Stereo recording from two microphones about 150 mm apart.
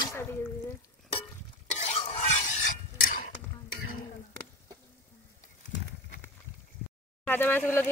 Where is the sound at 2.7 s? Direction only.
60° left (ahead or behind).